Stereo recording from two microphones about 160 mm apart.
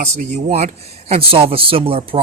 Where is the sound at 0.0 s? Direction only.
45° right (ahead or behind).